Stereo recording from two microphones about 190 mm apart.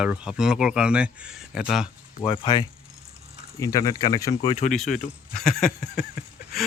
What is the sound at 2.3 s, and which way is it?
Speech, 25° left (ahead or behind).